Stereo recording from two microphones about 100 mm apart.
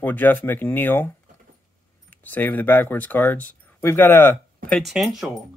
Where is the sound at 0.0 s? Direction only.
20° left (ahead or behind).